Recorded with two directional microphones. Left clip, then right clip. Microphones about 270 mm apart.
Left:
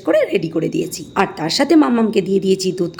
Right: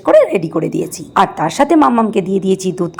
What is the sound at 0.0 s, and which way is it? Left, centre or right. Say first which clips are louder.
A woman's voice: right 6 dB; centre.